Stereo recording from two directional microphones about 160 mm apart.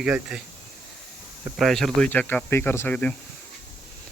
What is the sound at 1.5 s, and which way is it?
Speech, centre (ahead or behind).